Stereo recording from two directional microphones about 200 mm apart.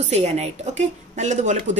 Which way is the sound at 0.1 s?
35° right (ahead or behind).